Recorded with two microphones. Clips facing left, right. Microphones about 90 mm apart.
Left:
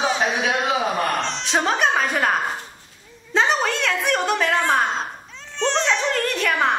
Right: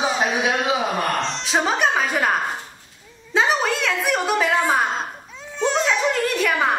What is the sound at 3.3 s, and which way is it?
A woman's voice, 5° right (ahead or behind).